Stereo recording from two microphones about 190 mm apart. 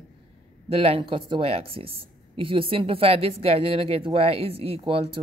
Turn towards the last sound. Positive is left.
turn(degrees=-30)  # may be behind; listen again after turning